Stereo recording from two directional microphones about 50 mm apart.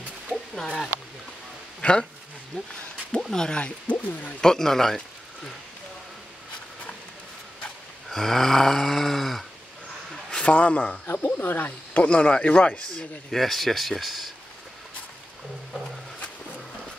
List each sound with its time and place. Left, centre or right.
0.3 s a sound: centre
1.8 s a sound: left
2.5 s speech: centre
3.6 s a man's voice: left
4.4 s speech: centre
8.1 s snoring: centre
10.3 s speech: left
11.3 s speech: left
12.1 s a man's voice: left
13.4 s speech: centre